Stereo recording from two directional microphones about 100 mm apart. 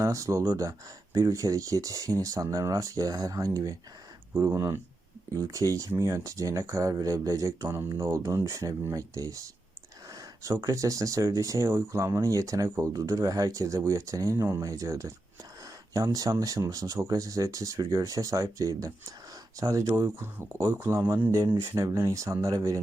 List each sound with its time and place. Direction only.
0.0 s speech: 30° right (ahead or behind)